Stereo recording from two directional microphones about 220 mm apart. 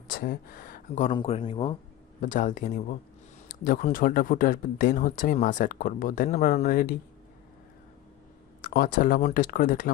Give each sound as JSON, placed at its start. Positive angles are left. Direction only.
{"t": 0.1, "sound": "speech", "side_deg": 40}
{"t": 2.2, "sound": "speech", "side_deg": 35}
{"t": 8.6, "sound": "speech", "side_deg": 40}